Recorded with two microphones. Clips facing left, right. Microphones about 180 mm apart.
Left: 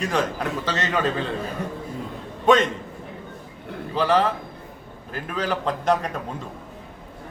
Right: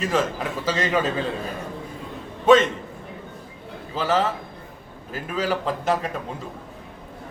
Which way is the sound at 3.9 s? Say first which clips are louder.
Left 2 dB; 5° right (ahead or behind).